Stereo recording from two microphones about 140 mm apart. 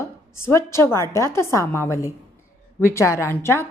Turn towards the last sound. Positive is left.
turn(degrees=20)  # may be behind; listen again after turning